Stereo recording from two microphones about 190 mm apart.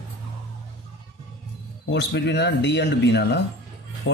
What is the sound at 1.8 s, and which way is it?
Speech, 65° left (ahead or behind).